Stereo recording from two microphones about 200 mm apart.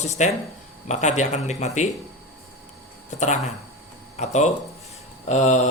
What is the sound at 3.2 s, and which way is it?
A man's voice, 35° left (ahead or behind).